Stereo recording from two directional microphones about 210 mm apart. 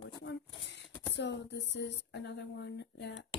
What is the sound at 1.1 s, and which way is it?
Speech, 55° left (ahead or behind).